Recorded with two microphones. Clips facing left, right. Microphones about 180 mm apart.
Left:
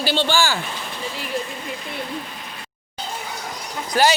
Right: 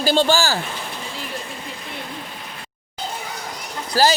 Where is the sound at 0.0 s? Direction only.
40° right (ahead or behind).